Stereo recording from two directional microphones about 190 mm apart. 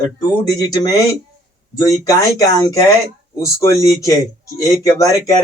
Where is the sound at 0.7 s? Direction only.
20° left (ahead or behind).